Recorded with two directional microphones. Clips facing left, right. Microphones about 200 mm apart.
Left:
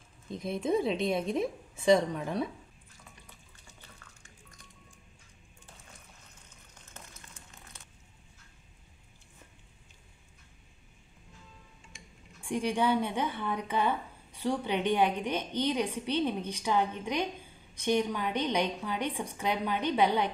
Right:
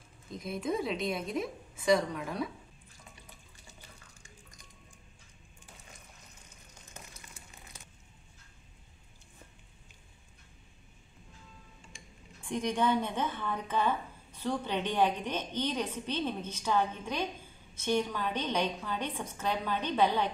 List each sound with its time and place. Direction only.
0.4 s a woman's voice: 25° left (ahead or behind)
6.9 s crumpling: 10° right (ahead or behind)
12.4 s speech: 10° left (ahead or behind)